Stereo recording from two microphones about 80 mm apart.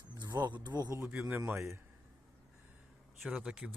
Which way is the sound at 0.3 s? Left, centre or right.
Right.